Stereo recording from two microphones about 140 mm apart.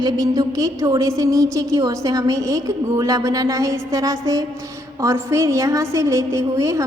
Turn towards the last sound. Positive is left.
turn(degrees=-20)  # may be behind; listen again after turning